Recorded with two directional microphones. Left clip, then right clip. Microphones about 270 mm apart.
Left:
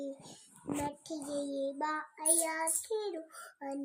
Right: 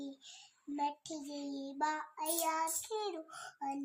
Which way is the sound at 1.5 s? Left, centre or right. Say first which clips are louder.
Even; centre.